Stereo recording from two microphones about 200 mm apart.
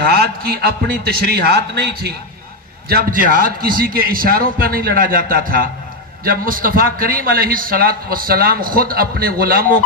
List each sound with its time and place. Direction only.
0.1 s a man's voice: 50° right (ahead or behind)